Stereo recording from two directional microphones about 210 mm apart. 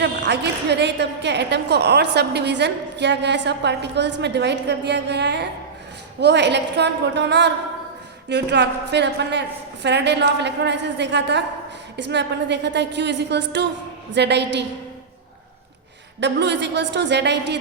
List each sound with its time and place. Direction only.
0.0 s a woman's voice: 55° right (ahead or behind)
16.2 s a woman's voice: 55° right (ahead or behind)